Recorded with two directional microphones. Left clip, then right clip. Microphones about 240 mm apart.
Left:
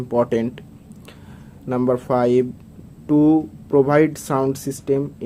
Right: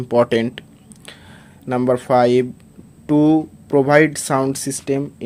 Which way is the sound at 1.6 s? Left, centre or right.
Right.